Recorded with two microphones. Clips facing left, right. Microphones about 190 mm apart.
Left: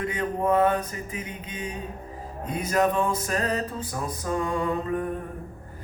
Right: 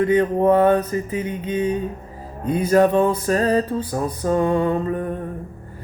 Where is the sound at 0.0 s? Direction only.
30° right (ahead or behind).